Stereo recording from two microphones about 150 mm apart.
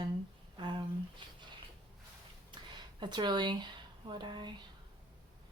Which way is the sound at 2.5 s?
30° right (ahead or behind).